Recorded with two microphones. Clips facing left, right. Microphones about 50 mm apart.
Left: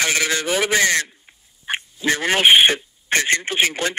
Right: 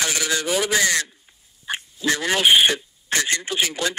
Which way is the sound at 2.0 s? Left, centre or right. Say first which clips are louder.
Left 2 dB; left.